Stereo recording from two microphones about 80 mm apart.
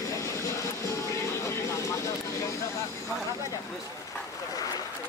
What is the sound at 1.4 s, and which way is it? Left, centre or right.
Vehicle, left.